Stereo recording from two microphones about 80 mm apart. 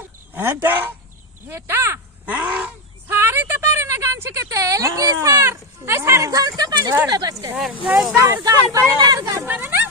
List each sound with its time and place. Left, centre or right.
0.3 s speech: right
2.2 s a sound: centre
3.1 s a woman's voice: right
7.7 s a sound: centre
8.1 s speech: right
9.5 s speech: right